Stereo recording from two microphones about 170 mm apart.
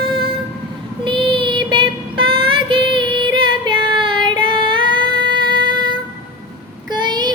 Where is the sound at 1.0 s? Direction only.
30° right (ahead or behind).